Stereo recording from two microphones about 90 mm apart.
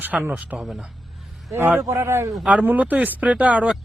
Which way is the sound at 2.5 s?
15° right (ahead or behind).